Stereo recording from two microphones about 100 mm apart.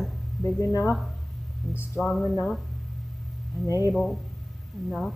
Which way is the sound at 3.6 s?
35° left (ahead or behind).